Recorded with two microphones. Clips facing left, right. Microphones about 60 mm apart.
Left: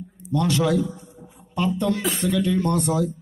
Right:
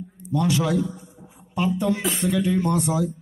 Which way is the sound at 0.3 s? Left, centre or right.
Centre.